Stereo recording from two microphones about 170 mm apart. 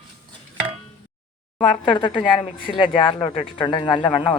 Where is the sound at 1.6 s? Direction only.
30° left (ahead or behind).